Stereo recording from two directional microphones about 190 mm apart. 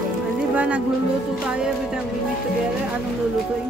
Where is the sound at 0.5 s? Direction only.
5° right (ahead or behind).